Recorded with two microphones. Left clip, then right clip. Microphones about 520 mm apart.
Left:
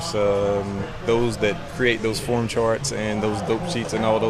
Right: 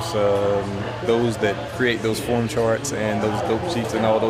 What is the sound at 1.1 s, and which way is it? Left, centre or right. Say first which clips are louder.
Speech: even; left.